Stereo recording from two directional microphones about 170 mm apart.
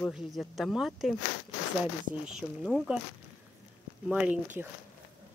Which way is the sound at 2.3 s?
5° right (ahead or behind).